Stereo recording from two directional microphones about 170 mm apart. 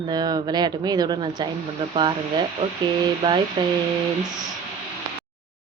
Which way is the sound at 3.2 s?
25° right (ahead or behind).